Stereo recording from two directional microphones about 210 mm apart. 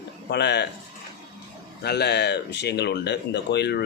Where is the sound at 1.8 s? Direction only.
50° left (ahead or behind).